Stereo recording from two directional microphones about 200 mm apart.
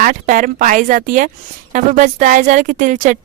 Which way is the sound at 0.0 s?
40° right (ahead or behind).